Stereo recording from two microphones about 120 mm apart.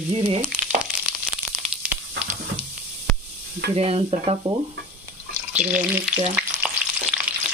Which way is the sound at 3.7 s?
55° right (ahead or behind).